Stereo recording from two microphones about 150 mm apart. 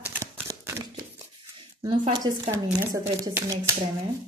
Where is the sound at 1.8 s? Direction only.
30° right (ahead or behind).